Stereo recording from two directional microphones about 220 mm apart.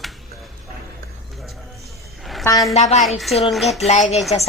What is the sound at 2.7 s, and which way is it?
Speech, 30° left (ahead or behind).